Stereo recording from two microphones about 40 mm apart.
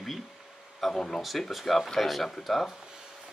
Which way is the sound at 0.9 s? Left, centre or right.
Centre.